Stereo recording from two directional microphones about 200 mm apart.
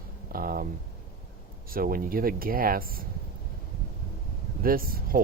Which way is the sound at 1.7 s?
45° right (ahead or behind).